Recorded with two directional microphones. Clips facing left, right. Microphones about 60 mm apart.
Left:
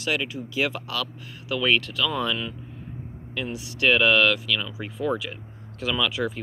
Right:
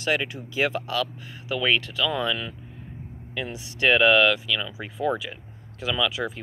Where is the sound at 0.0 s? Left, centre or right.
Right; by 2.1 s centre.